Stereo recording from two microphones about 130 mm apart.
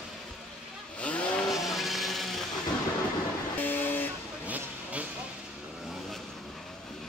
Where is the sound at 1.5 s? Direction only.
Centre (ahead or behind).